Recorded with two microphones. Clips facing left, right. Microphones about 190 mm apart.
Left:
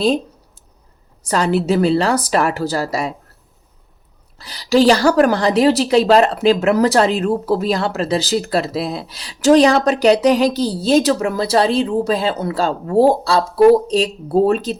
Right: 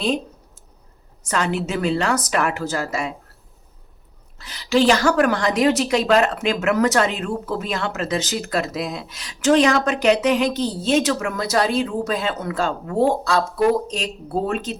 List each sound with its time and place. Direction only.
1.2 s a woman's voice: 35° left (ahead or behind)
4.4 s a woman's voice: 35° left (ahead or behind)